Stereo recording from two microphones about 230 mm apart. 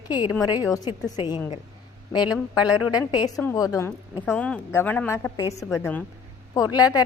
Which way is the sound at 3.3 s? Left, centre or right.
Centre.